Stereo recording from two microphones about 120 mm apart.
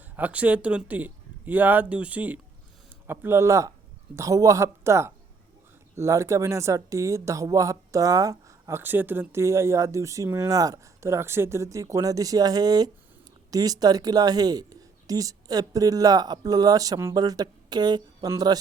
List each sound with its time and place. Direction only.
0.2 s speech: 10° right (ahead or behind); by 18.6 s 30° right (ahead or behind)